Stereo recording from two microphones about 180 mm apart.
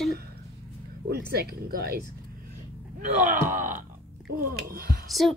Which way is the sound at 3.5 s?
45° right (ahead or behind).